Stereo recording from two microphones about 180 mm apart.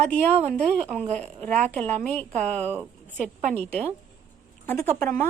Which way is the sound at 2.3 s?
40° right (ahead or behind).